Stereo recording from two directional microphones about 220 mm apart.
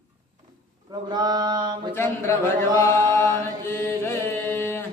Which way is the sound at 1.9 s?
10° left (ahead or behind).